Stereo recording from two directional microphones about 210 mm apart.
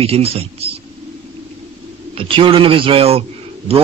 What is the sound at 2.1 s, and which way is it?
A man's voice, 25° right (ahead or behind).